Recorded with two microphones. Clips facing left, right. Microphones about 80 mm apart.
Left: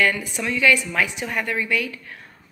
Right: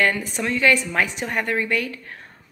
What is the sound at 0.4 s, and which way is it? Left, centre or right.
A woman's voice, right.